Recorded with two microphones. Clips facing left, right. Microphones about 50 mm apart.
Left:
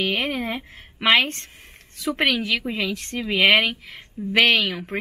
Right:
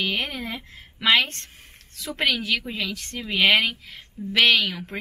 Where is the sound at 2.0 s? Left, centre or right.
Centre.